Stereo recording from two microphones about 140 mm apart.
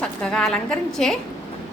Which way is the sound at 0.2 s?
5° left (ahead or behind).